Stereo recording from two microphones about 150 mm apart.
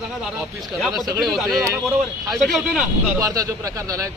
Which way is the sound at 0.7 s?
Centre (ahead or behind).